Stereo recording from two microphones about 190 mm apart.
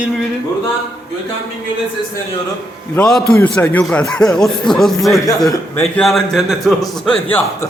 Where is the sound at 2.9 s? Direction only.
5° left (ahead or behind).